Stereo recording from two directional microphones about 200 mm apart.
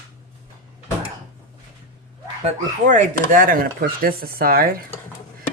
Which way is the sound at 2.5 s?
40° right (ahead or behind).